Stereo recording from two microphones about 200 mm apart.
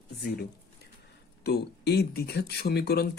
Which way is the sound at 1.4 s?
55° left (ahead or behind).